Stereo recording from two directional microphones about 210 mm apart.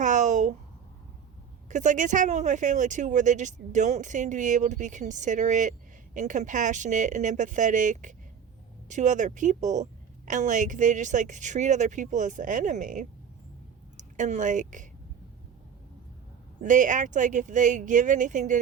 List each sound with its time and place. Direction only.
0.0 s a sound: 35° right (ahead or behind)
1.7 s a woman's voice: 35° right (ahead or behind)
16.6 s a woman's voice: 35° right (ahead or behind)